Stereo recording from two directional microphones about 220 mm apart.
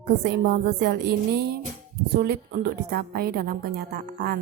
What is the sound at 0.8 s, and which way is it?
A woman's voice, 45° right (ahead or behind).